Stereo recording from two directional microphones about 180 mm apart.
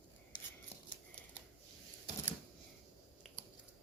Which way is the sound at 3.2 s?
Centre (ahead or behind).